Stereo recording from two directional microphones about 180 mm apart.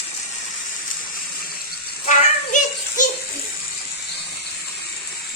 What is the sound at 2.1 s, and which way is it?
Child singing, 45° left (ahead or behind).